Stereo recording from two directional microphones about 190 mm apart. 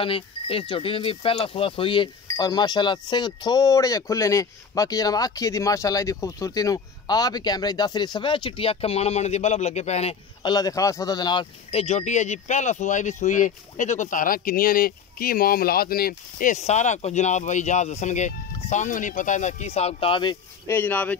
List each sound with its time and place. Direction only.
0.0 s speech: 30° left (ahead or behind)
10.5 s speech: 20° left (ahead or behind)
20.6 s speech: 10° left (ahead or behind)